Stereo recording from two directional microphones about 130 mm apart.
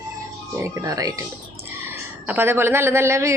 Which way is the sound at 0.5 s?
20° right (ahead or behind).